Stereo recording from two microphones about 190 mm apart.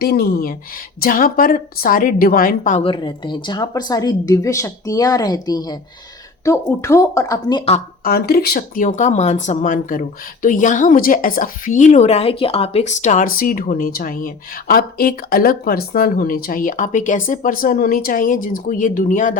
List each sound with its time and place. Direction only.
0.0 s speech: 55° left (ahead or behind)
2.8 s a woman's voice: 25° left (ahead or behind)
8.0 s speech: 50° left (ahead or behind)